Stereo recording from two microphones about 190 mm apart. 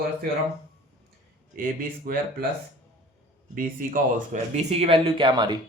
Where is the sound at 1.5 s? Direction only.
45° right (ahead or behind).